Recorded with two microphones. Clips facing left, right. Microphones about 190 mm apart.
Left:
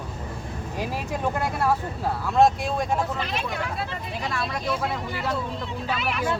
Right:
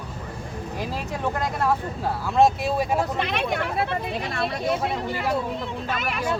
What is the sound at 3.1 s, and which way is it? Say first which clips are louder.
Speech: right 4 dB; 65° right (ahead or behind).